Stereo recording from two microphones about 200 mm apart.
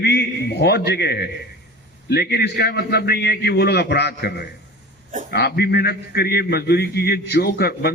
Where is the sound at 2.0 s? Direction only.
55° left (ahead or behind).